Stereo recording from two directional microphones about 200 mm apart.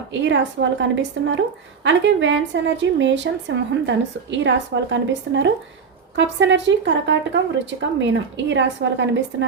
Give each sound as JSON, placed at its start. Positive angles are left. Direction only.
{"t": 0.1, "sound": "a woman's voice", "side_deg": -65}